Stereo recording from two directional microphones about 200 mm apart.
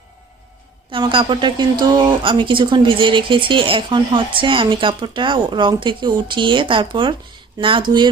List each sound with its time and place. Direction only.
0.9 s a woman's voice: 25° right (ahead or behind)